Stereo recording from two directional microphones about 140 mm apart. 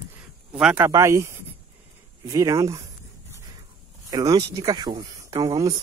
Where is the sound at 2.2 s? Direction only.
25° right (ahead or behind).